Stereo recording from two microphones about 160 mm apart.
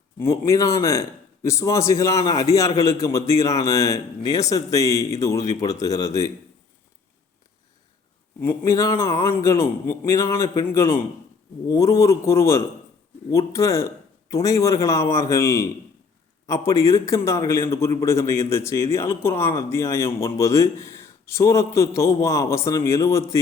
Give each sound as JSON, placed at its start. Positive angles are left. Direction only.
{"t": 0.2, "sound": "a man's voice", "side_deg": 20}
{"t": 8.4, "sound": "a man's voice", "side_deg": 15}